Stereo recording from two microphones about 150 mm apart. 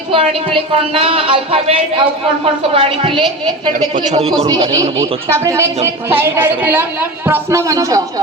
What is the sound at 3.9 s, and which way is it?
Speech, 50° right (ahead or behind).